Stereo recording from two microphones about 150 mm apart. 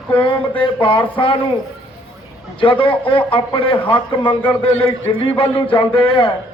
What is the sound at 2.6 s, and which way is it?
Speech, 35° left (ahead or behind).